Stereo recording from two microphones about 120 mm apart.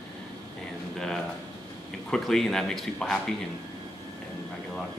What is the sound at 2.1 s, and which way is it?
Speech, 5° left (ahead or behind).